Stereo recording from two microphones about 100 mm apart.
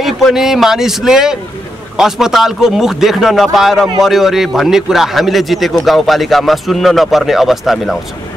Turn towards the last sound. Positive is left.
turn(degrees=0)  # may be behind; listen again after turning